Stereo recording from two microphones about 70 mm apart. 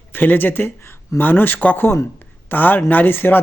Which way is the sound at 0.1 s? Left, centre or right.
Left.